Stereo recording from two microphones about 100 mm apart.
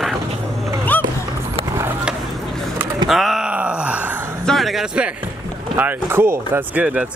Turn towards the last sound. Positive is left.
turn(degrees=-20)  # may be behind; listen again after turning